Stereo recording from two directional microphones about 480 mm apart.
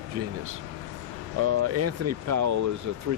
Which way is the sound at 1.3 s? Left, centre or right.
Right.